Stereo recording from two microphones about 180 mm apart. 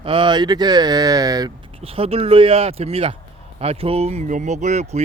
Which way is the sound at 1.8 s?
30° right (ahead or behind).